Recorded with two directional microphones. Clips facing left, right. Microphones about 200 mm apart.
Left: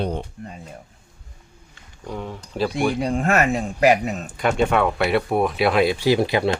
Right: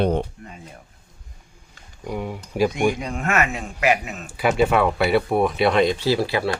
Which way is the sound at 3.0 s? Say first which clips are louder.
Left 4 dB; 35° left (ahead or behind).